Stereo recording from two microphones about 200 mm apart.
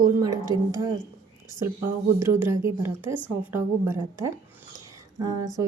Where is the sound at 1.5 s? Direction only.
15° right (ahead or behind).